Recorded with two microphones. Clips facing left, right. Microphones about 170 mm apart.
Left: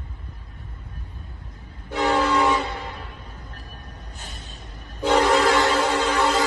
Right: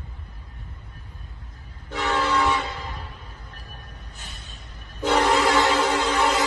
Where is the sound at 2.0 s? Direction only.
35° left (ahead or behind).